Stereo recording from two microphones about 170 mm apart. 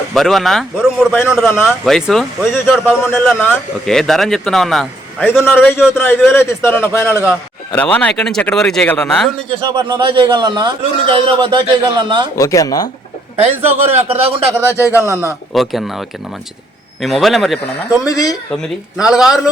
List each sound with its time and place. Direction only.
0.1 s speech: centre (ahead or behind)
3.1 s speech: 10° left (ahead or behind); by 5.6 s 5° right (ahead or behind)
5.9 s a man's voice: 15° left (ahead or behind)
9.5 s a man's voice: 25° right (ahead or behind)
12.4 s speech: 20° left (ahead or behind)
13.9 s a man's voice: 35° right (ahead or behind)
14.7 s a man's voice: 15° left (ahead or behind)
14.9 s a man's voice: 15° right (ahead or behind)
15.5 s speech: centre (ahead or behind)
18.0 s speech: 20° left (ahead or behind)
18.5 s speech: 5° right (ahead or behind)